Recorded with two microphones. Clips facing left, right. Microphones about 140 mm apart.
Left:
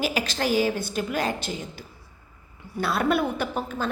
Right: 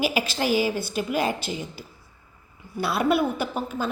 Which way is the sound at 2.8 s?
10° right (ahead or behind).